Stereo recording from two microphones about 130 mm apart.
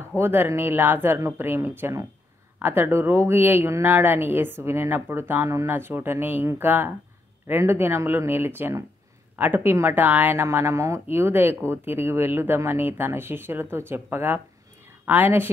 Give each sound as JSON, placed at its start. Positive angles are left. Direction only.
{"t": 0.2, "sound": "speech", "side_deg": -15}